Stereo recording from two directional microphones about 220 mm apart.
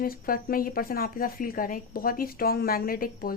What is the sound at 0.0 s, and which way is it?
A woman's voice, 40° left (ahead or behind).